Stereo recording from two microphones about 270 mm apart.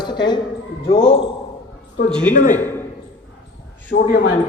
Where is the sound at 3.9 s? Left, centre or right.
Left.